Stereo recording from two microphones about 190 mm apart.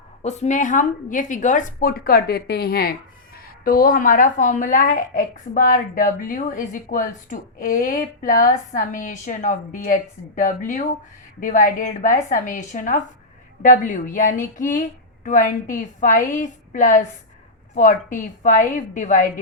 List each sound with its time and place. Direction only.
0.2 s speech: 35° left (ahead or behind)